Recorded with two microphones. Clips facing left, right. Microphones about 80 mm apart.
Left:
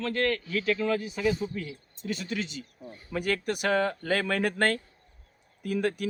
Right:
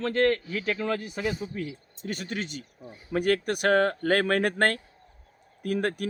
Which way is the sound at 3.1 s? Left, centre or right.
Right.